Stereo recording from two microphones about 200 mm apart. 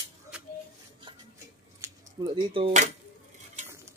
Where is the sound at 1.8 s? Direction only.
15° right (ahead or behind).